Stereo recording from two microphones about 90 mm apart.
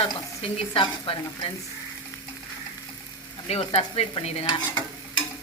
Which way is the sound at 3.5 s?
90° left.